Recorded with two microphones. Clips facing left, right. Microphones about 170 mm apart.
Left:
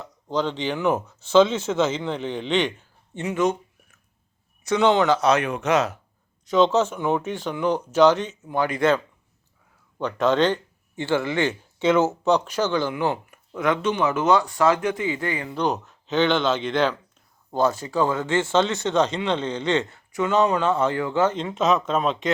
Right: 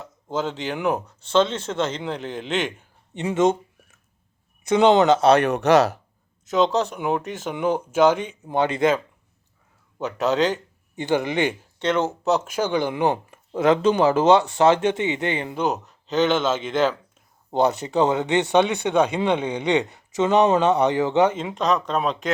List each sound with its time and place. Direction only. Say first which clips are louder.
0.3 s speech: left 1 dB; 5° right (ahead or behind)
3.2 s a sound: right 3 dB; 25° right (ahead or behind)
4.6 s speech: right 3 dB; 20° right (ahead or behind)
5.4 s speech: right 5 dB; 65° right (ahead or behind)
6.5 s speech: left 2 dB; centre (ahead or behind)
8.4 s speech: right 2 dB; 25° right (ahead or behind)
10.0 s speech: left 1 dB; 5° right (ahead or behind)
10.9 s speech: right 1 dB; 20° right (ahead or behind)
11.8 s speech: left 3 dB; 5° left (ahead or behind); by 15.5 s 25° right (ahead or behind)
15.5 s speech: even; centre (ahead or behind)
17.5 s speech: right 2 dB; 20° right (ahead or behind)
21.5 s speech: left 1 dB; 5° left (ahead or behind)